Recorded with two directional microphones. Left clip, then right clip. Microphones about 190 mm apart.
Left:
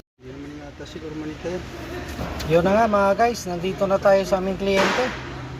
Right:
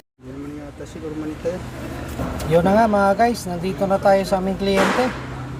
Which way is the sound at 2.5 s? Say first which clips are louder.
Right 2 dB; centre (ahead or behind).